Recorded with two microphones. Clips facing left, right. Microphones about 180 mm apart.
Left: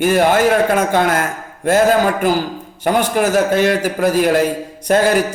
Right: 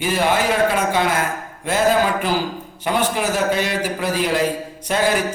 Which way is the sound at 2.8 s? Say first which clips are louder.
Left 5 dB; 45° left (ahead or behind).